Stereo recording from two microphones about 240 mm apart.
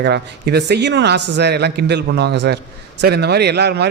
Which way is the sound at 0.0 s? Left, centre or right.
Right.